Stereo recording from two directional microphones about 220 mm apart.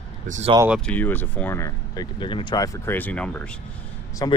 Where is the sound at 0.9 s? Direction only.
10° left (ahead or behind).